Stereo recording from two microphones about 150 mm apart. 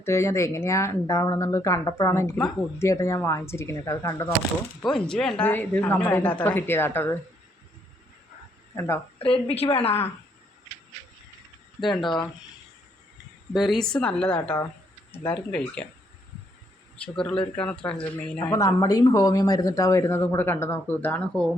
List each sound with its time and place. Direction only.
0.0 s speech: 20° left (ahead or behind)
4.8 s a woman's voice: 5° left (ahead or behind)
8.7 s a woman's voice: 20° left (ahead or behind)
9.1 s a woman's voice: 40° left (ahead or behind)
11.9 s a woman's voice: 30° left (ahead or behind)
13.5 s a woman's voice: centre (ahead or behind)
17.0 s a woman's voice: 5° left (ahead or behind)
18.5 s speech: 25° left (ahead or behind); by 21.5 s 10° left (ahead or behind)